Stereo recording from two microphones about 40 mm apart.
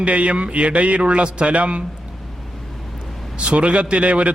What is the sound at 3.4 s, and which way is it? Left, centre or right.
Mantra, right.